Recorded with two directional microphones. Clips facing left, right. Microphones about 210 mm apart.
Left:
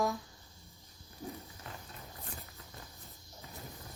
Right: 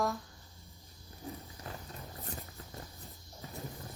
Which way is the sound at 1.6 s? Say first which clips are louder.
Right 4 dB; 35° right (ahead or behind).